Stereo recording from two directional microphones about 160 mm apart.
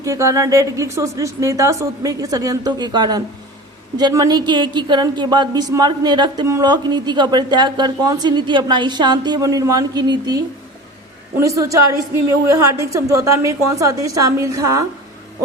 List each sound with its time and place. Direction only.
0.0 s a woman's voice: 20° right (ahead or behind)